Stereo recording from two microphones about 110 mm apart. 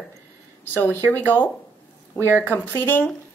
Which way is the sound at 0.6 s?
20° left (ahead or behind).